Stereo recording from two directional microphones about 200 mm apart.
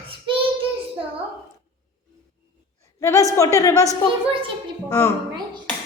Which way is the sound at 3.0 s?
15° left (ahead or behind).